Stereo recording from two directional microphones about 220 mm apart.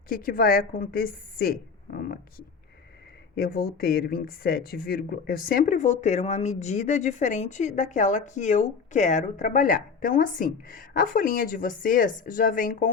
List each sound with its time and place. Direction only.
0.1 s speech: 40° left (ahead or behind)
3.3 s speech: 45° left (ahead or behind)